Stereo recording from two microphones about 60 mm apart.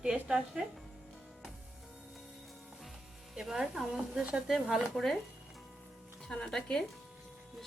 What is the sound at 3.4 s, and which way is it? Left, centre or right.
Speech, centre.